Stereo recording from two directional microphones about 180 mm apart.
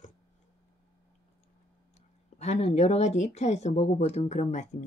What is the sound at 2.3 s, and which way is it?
Speech, 40° left (ahead or behind).